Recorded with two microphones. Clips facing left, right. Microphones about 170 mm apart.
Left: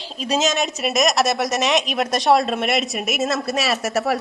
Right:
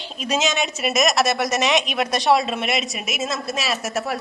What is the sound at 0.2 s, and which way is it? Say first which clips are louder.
Speech: left 2 dB; 35° left (ahead or behind).